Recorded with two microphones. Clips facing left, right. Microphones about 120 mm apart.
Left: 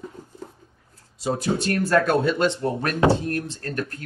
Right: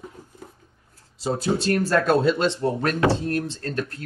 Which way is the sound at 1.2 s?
30° right (ahead or behind).